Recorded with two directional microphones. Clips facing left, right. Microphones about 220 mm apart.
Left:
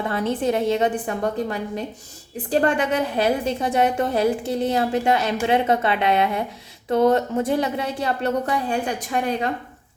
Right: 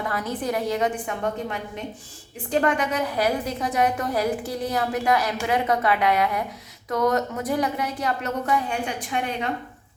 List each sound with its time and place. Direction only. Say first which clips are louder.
0.0 s a woman's voice: left 5 dB; 25° left (ahead or behind)